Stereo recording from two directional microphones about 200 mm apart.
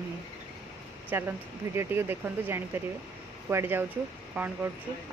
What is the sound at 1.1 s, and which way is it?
Speech, 10° right (ahead or behind).